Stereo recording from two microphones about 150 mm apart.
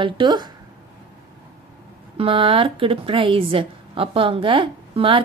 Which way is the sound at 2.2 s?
35° right (ahead or behind).